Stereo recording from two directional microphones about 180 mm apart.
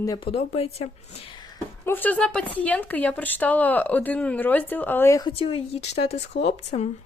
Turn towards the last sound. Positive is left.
turn(degrees=40)  # may be behind; listen again after turning